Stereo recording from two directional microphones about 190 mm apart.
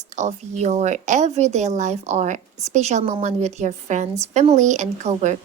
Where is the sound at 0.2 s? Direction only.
35° right (ahead or behind).